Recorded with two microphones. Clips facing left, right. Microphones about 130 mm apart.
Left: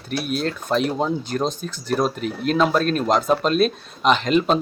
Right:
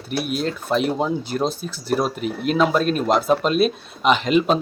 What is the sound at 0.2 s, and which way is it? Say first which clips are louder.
Speech: right 1 dB; 5° right (ahead or behind).